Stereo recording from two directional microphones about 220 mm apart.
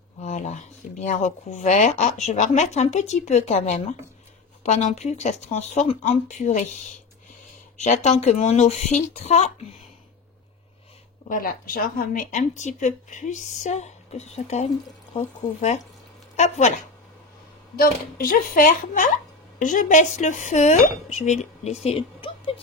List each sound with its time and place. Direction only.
0.2 s speech: 30° left (ahead or behind)
11.2 s speech: 40° left (ahead or behind)
21.8 s a sound: 25° left (ahead or behind)